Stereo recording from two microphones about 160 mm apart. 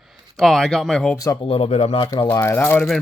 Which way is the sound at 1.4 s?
40° left (ahead or behind).